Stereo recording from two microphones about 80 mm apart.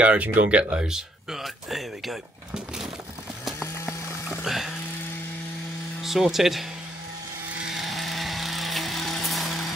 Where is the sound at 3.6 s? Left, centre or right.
Left.